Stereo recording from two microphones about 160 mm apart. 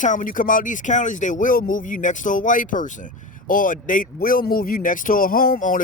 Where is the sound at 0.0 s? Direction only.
50° left (ahead or behind).